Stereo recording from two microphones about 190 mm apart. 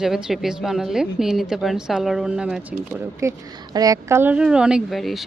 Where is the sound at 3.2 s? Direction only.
15° right (ahead or behind).